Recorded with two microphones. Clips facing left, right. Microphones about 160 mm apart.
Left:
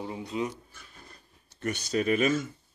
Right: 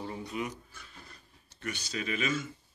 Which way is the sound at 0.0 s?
20° left (ahead or behind).